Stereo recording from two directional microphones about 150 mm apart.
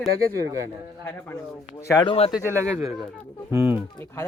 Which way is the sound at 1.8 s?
25° left (ahead or behind).